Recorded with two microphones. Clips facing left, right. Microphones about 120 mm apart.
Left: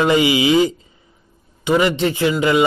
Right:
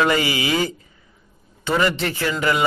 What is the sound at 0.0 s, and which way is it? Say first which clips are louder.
A man's voice: left 5 dB; 20° left (ahead or behind).